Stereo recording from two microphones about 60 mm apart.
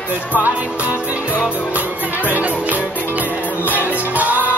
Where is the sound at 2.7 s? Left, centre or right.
Right.